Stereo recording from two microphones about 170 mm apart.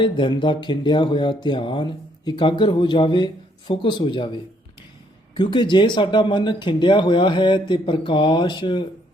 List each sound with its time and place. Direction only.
0.0 s speech: 30° left (ahead or behind)